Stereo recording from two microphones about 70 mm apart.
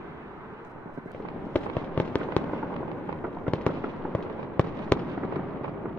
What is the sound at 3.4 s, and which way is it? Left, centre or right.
Fireworks, centre.